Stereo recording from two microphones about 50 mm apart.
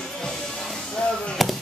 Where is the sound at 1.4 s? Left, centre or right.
Centre.